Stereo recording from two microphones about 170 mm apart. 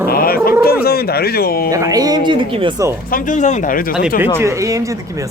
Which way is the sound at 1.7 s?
20° right (ahead or behind).